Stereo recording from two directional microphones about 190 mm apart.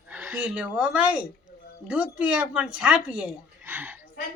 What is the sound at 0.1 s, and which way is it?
Speech, 10° right (ahead or behind).